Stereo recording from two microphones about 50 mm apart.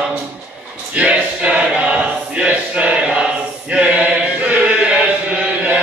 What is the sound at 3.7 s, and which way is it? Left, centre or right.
Chant, right.